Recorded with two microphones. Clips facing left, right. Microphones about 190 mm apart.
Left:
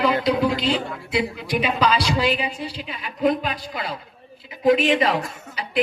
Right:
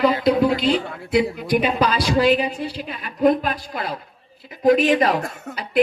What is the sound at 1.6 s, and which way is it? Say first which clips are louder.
Speech: left 3 dB; 50° right (ahead or behind).